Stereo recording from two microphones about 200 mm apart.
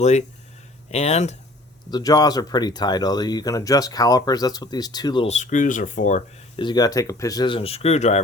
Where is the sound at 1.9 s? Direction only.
20° left (ahead or behind); by 6.4 s 40° left (ahead or behind).